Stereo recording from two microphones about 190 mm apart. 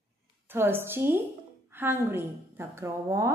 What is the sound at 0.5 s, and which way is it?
A woman's voice, 10° right (ahead or behind).